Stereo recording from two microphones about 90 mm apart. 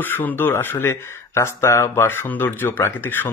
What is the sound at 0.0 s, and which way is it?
Speech, 20° left (ahead or behind).